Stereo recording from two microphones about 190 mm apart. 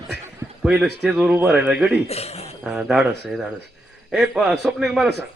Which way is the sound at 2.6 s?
Centre (ahead or behind).